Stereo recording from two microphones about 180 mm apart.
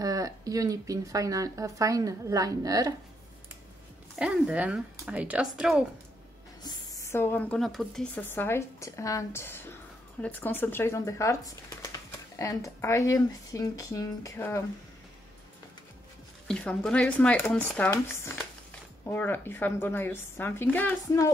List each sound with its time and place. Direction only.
0.0 s speech: 20° right (ahead or behind)
4.2 s speech: 5° right (ahead or behind)
6.6 s a woman's voice: 20° left (ahead or behind)
16.4 s speech: 5° left (ahead or behind)